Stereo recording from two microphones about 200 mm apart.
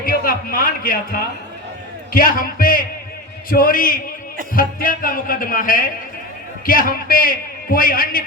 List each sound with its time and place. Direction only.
0.0 s a man's voice: 45° left (ahead or behind)